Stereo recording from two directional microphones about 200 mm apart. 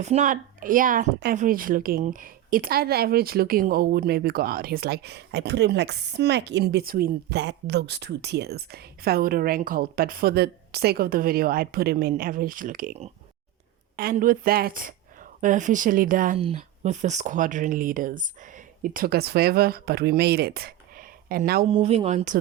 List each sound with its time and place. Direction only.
0.0 s speech: 35° right (ahead or behind)
13.9 s speech: 45° right (ahead or behind)
21.7 s speech: 30° right (ahead or behind)